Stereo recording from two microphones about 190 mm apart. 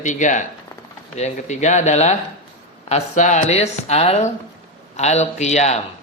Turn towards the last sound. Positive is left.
turn(degrees=35)  # may be behind; listen again after turning